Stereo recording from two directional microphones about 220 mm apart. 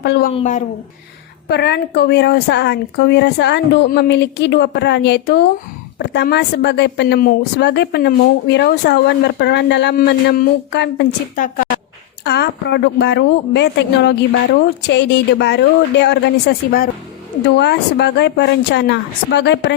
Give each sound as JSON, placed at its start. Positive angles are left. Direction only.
{"t": 0.0, "sound": "speech", "side_deg": 50}
{"t": 0.3, "sound": "a woman's voice", "side_deg": 35}
{"t": 1.5, "sound": "speech", "side_deg": 50}
{"t": 12.2, "sound": "speech", "side_deg": 50}